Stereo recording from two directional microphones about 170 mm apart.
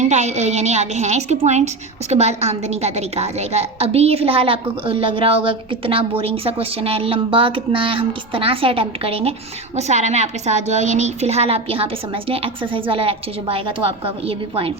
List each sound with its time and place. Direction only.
0.0 s a woman's voice: 40° right (ahead or behind)